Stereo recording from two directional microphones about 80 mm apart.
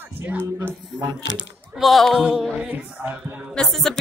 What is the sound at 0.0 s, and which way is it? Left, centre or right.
Music, right.